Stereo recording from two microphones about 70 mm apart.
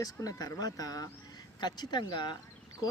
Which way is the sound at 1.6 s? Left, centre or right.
Left.